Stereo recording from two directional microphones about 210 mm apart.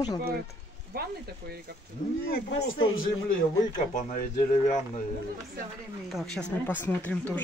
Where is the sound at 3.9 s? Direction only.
35° left (ahead or behind).